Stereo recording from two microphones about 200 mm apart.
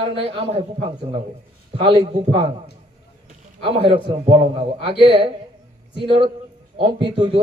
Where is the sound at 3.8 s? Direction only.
25° right (ahead or behind).